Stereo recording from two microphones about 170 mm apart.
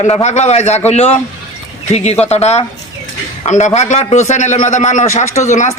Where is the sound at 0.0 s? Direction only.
40° left (ahead or behind).